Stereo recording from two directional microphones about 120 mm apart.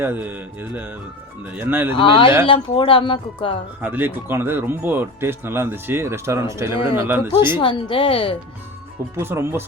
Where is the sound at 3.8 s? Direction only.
15° right (ahead or behind).